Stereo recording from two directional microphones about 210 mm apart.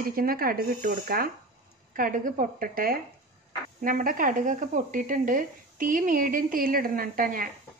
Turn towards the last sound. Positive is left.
turn(degrees=-40)  # may be behind; listen again after turning